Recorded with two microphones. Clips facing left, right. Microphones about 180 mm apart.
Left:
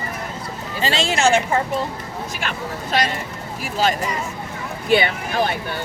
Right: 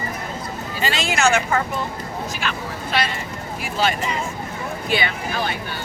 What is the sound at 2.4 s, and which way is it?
Speech, 45° left (ahead or behind).